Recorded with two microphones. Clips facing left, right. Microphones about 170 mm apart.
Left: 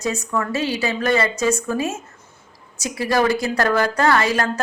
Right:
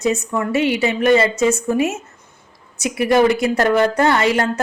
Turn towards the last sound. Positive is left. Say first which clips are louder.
# right 2 dB
turn(degrees=-25)  # may be behind; listen again after turning